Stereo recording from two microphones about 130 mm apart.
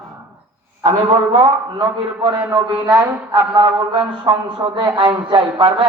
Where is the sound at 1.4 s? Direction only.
35° right (ahead or behind).